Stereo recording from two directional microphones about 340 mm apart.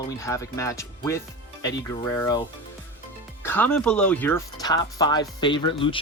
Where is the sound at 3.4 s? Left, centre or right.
Centre.